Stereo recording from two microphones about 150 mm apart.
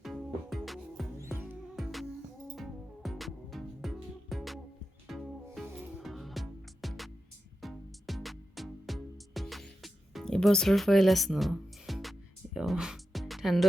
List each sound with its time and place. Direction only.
0.0 s music: centre (ahead or behind)
1.2 s music: 15° right (ahead or behind)
1.7 s music: centre (ahead or behind)